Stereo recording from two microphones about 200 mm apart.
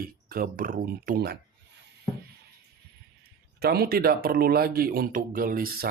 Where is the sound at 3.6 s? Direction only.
50° right (ahead or behind).